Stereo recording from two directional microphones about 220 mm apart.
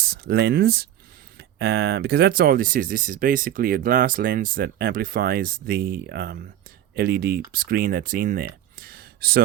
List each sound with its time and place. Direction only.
0.0 s speech: 45° right (ahead or behind)